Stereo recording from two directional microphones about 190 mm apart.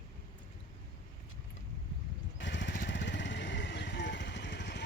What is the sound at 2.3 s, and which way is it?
Vehicle, 70° left (ahead or behind).